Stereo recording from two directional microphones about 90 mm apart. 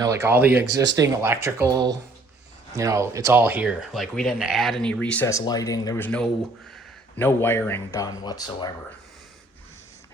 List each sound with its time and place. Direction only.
0.0 s speech: 30° right (ahead or behind)
0.8 s speech: 40° right (ahead or behind)
3.4 s speech: 15° right (ahead or behind)
3.9 s speech: centre (ahead or behind)
4.8 s speech: 10° left (ahead or behind)
5.5 s speech: 40° left (ahead or behind)
6.0 s a man's voice: 15° left (ahead or behind)
7.9 s speech: 40° left (ahead or behind)
8.2 s speech: 50° left (ahead or behind)